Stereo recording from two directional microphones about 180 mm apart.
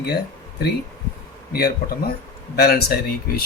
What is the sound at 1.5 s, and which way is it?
Speech, 60° left (ahead or behind).